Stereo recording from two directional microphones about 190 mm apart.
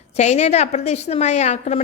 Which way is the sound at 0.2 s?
35° left (ahead or behind).